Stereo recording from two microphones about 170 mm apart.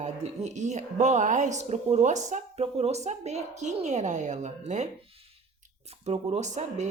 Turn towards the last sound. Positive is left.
turn(degrees=-45)  # may be behind; listen again after turning